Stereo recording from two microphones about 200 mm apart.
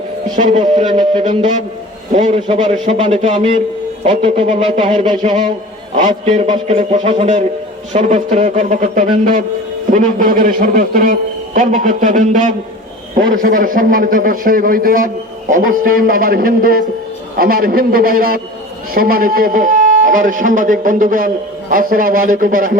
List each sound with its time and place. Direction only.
0.3 s a man's voice: 40° right (ahead or behind)